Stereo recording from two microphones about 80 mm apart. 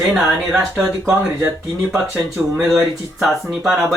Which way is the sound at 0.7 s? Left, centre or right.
Right.